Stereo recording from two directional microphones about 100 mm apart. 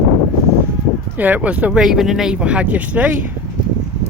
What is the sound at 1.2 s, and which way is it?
Speech, 15° right (ahead or behind).